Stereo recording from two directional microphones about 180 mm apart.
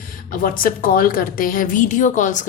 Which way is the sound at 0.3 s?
50° left (ahead or behind).